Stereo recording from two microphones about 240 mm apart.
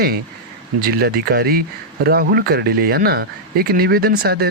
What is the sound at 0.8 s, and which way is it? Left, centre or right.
Speech, right.